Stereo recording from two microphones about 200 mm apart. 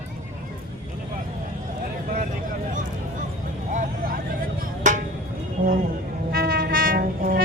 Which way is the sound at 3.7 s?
40° right (ahead or behind).